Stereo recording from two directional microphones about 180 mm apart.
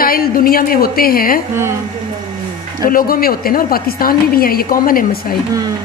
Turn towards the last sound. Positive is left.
turn(degrees=50)  # may be behind; listen again after turning